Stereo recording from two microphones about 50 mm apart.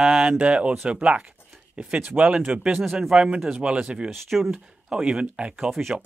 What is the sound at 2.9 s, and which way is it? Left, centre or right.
Speech, centre.